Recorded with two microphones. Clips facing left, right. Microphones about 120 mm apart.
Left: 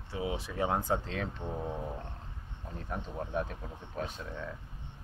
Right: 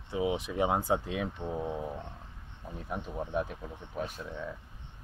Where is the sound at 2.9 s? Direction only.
15° right (ahead or behind).